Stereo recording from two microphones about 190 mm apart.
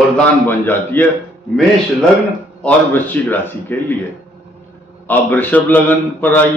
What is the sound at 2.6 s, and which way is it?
A man's voice, 10° left (ahead or behind).